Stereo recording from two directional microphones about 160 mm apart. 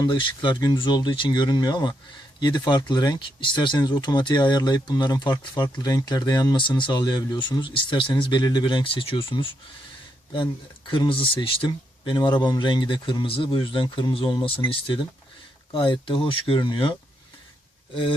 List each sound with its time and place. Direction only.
0.0 s speech: 30° left (ahead or behind)